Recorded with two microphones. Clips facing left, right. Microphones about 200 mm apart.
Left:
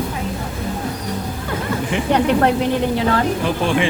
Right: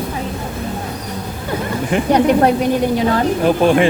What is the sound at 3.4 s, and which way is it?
Speech, 45° right (ahead or behind).